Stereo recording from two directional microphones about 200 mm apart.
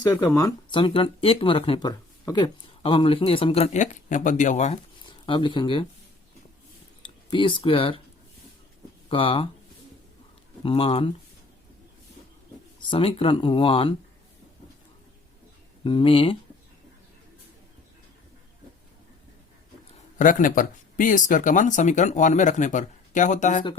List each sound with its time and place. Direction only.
0.1 s speech: 15° left (ahead or behind)
7.0 s speech: 25° left (ahead or behind)
9.0 s speech: 25° left (ahead or behind)
10.6 s speech: 25° left (ahead or behind)
12.9 s speech: 25° left (ahead or behind)
15.8 s speech: 25° left (ahead or behind)
20.1 s speech: 40° left (ahead or behind)